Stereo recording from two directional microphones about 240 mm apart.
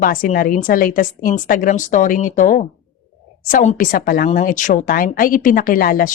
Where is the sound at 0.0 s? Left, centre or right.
Left.